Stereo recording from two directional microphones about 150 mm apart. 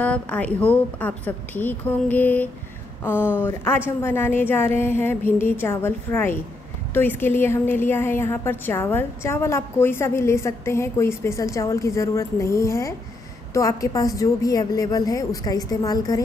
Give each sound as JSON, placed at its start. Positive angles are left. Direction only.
{"t": 0.0, "sound": "a woman's voice", "side_deg": 10}